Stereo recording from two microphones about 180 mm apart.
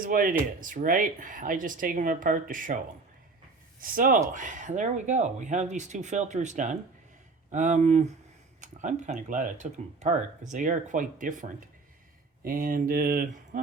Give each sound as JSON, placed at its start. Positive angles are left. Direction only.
{"t": 0.0, "sound": "speech", "side_deg": -50}
{"t": 3.8, "sound": "speech", "side_deg": -50}